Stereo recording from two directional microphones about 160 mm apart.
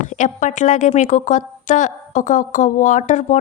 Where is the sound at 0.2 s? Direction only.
50° left (ahead or behind).